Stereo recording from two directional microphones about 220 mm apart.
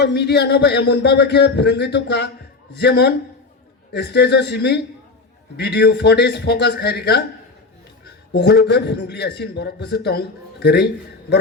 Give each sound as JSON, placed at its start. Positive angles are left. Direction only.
{"t": 0.0, "sound": "a man's voice", "side_deg": 50}
{"t": 8.3, "sound": "a man's voice", "side_deg": 50}